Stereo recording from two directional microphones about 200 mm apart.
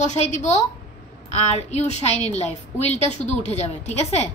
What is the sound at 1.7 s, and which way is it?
A woman's voice, 35° left (ahead or behind).